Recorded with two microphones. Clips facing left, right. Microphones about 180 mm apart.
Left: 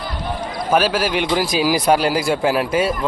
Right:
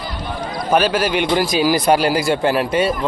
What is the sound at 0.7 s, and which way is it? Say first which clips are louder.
A man's voice: right 1 dB; 5° left (ahead or behind).